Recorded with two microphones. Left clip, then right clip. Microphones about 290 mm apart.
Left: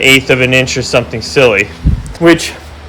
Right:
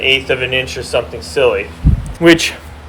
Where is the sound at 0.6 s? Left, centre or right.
Left.